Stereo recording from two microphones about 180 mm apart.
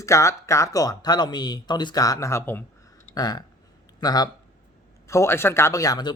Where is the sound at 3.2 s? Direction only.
20° left (ahead or behind).